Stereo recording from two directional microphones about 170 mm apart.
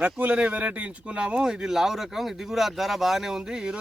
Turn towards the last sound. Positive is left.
turn(degrees=-5)  # may be behind; listen again after turning